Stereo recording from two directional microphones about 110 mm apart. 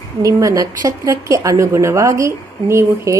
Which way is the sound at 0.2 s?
30° right (ahead or behind).